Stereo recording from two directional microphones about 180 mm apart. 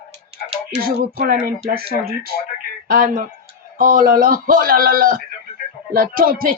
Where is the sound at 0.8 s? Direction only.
55° right (ahead or behind).